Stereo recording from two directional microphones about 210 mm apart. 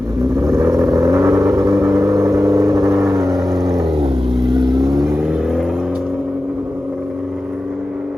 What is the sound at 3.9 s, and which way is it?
Vehicle, 25° right (ahead or behind).